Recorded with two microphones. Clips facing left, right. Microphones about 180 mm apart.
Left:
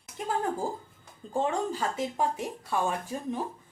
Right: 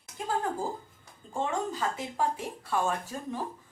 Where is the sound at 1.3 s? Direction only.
30° left (ahead or behind).